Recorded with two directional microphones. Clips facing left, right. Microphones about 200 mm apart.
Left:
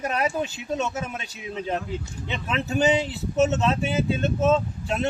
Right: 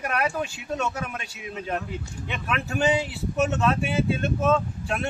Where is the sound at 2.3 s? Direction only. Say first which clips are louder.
Left 2 dB; 20° left (ahead or behind).